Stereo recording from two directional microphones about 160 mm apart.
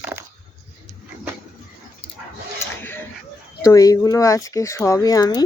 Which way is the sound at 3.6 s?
20° left (ahead or behind).